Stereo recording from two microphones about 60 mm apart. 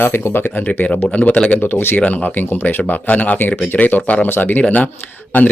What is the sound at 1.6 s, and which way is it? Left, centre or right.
Speech, left.